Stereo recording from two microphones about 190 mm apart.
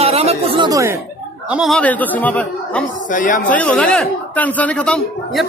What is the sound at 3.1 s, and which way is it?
Speech, 45° left (ahead or behind).